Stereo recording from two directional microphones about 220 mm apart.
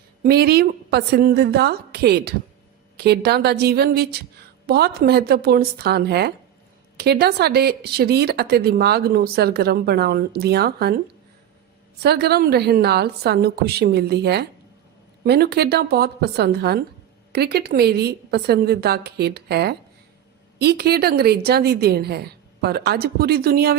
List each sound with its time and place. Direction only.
0.2 s speech: 45° right (ahead or behind)
12.0 s speech: 45° right (ahead or behind)